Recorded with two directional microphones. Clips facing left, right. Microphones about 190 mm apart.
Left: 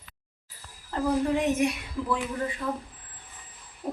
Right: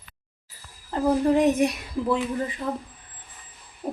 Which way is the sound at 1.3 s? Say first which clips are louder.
Right 5 dB; 35° right (ahead or behind).